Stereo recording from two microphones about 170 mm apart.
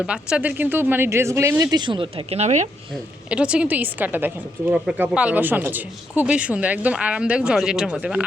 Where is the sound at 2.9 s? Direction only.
5° right (ahead or behind).